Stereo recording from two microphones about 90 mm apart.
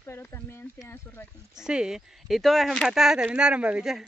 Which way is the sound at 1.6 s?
10° right (ahead or behind).